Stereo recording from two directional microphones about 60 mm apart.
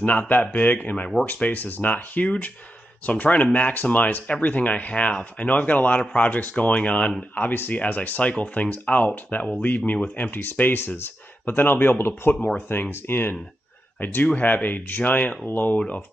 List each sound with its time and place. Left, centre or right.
0.0 s speech: left
7.4 s speech: left